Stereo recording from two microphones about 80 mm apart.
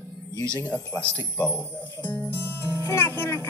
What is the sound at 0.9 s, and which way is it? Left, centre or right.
Speech, left.